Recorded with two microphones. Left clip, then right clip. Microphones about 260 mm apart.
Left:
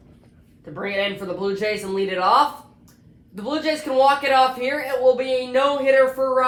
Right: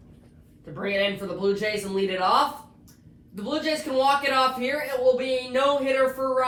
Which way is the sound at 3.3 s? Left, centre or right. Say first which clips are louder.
Left 3 dB; left.